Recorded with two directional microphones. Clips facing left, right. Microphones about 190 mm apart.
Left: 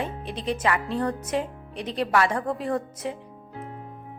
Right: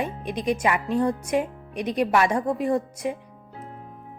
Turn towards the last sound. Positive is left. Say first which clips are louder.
# right 4 dB
turn(degrees=-15)  # may be behind; listen again after turning